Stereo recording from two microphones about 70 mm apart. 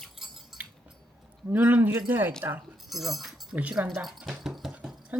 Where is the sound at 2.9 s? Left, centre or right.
Centre.